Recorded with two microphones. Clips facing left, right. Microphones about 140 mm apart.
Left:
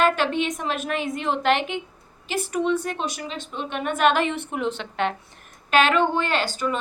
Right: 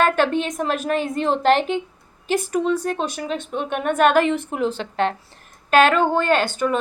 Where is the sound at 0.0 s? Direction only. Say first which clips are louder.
Right 3 dB; 45° right (ahead or behind).